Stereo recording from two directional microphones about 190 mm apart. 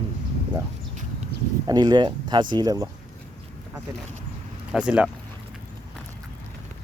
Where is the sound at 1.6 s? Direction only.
20° right (ahead or behind).